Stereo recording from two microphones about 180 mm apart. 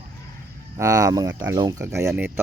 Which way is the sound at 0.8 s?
20° right (ahead or behind).